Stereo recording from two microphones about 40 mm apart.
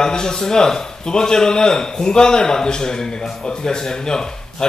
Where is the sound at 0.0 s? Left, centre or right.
Centre.